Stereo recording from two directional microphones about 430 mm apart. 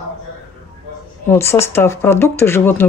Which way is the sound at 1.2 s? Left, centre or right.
Centre.